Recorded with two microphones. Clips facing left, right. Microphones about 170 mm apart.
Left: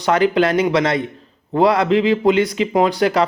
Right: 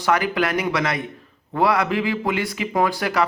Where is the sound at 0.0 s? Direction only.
25° left (ahead or behind).